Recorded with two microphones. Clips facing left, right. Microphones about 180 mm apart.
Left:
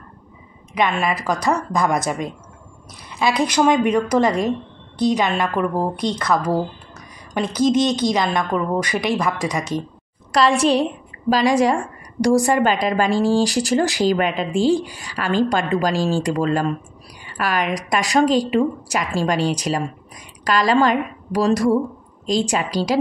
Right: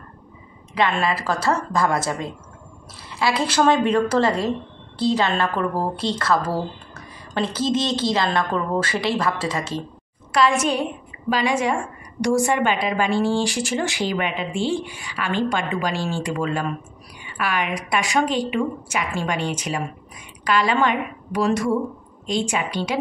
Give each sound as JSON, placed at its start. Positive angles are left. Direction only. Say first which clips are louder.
{"t": 0.7, "sound": "a woman's voice", "louder": "left 1 dB", "side_deg": 15}
{"t": 10.3, "sound": "a woman's voice", "louder": "left 3 dB", "side_deg": 35}